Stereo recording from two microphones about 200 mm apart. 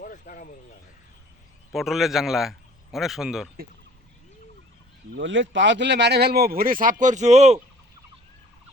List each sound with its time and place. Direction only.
0.0 s vehicle: 40° left (ahead or behind)
1.7 s a man's voice: centre (ahead or behind)
5.1 s speech: 70° right (ahead or behind); by 7.6 s 35° right (ahead or behind)